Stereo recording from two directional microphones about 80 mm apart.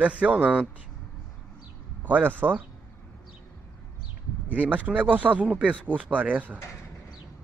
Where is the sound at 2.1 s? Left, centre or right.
Right.